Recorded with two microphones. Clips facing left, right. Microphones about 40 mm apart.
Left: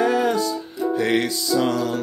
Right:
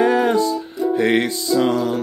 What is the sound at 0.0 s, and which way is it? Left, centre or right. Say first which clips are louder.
Music: right 4 dB; right.